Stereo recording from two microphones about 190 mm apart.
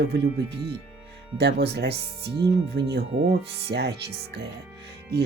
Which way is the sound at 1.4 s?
60° right (ahead or behind).